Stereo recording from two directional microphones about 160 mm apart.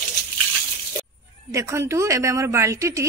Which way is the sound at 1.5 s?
20° right (ahead or behind).